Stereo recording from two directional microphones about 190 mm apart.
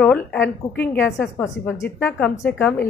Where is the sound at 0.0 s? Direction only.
10° left (ahead or behind).